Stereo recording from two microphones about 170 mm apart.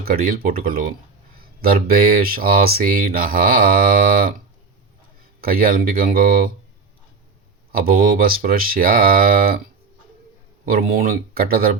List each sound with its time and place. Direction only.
0.0 s speech: 55° right (ahead or behind)
5.4 s speech: 60° right (ahead or behind)
7.7 s speech: 60° right (ahead or behind)
10.7 s speech: 60° right (ahead or behind)